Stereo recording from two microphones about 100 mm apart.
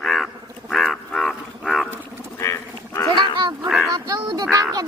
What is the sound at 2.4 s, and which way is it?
Livestock, 30° left (ahead or behind).